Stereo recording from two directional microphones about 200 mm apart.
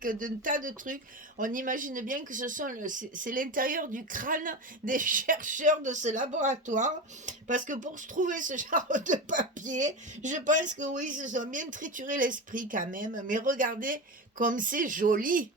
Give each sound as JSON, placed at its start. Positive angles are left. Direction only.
{"t": 0.0, "sound": "speech", "side_deg": -40}